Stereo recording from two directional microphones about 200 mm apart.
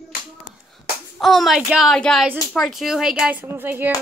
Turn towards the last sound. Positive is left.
turn(degrees=-10)  # may be behind; listen again after turning